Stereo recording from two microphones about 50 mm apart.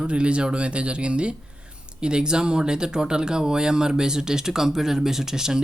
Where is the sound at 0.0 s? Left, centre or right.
Right.